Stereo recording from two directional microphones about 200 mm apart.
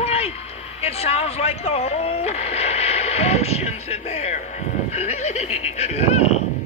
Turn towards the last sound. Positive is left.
turn(degrees=35)  # may be behind; listen again after turning